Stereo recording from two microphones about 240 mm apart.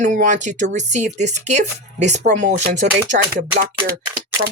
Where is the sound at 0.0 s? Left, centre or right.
Right.